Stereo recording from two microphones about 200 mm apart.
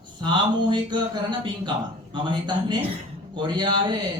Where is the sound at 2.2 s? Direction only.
20° right (ahead or behind).